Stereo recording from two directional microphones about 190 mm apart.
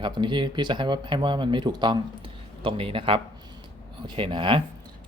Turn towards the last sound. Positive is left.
turn(degrees=-25)  # may be behind; listen again after turning